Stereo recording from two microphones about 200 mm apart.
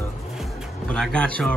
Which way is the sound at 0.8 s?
5° left (ahead or behind).